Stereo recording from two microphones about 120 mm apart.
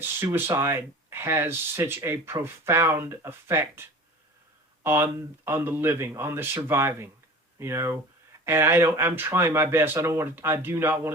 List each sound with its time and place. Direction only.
0.0 s speech: 20° right (ahead or behind)